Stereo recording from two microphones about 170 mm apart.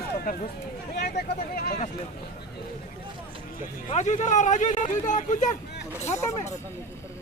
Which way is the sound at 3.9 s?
45° left (ahead or behind).